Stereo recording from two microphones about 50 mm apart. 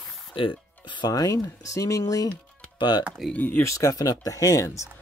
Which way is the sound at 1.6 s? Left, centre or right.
Left.